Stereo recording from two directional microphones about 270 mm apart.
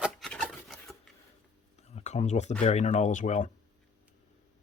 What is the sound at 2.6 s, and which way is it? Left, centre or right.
Speech, left.